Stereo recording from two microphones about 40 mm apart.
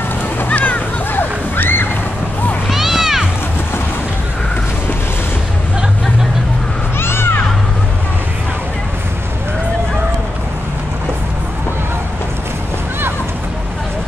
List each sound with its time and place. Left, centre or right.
0.6 s music: left
2.7 s music: centre
7.0 s music: left